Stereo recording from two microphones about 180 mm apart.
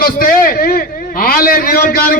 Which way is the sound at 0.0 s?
55° left (ahead or behind).